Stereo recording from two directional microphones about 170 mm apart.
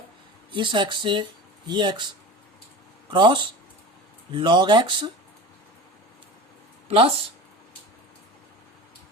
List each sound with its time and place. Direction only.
0.5 s speech: 25° right (ahead or behind)
3.1 s speech: 30° right (ahead or behind)
6.8 s speech: 35° right (ahead or behind)